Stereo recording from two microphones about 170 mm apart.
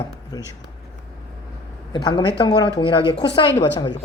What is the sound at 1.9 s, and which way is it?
Speech, 25° left (ahead or behind).